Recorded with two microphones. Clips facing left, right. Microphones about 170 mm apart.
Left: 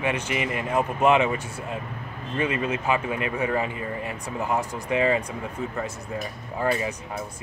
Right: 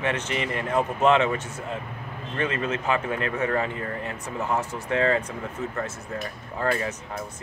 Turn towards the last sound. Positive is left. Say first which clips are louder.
# left 1 dB
turn(degrees=15)  # may be behind; listen again after turning